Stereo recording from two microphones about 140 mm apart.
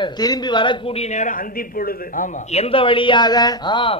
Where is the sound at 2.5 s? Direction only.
45° left (ahead or behind).